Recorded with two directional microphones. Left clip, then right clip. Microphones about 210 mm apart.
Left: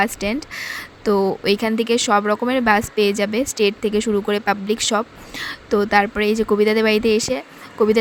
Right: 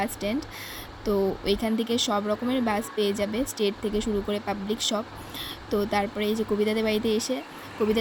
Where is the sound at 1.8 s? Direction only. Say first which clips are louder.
Left 9 dB; 45° left (ahead or behind).